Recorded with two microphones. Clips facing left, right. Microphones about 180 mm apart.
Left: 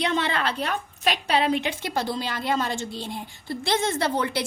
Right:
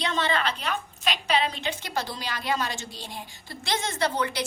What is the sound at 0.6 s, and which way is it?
A woman's voice, 60° left (ahead or behind).